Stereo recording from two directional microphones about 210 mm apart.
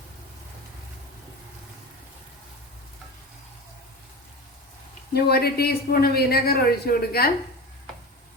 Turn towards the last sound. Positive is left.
turn(degrees=45)  # may be behind; listen again after turning